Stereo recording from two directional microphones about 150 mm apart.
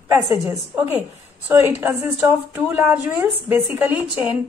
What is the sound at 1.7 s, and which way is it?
Speech, 15° right (ahead or behind).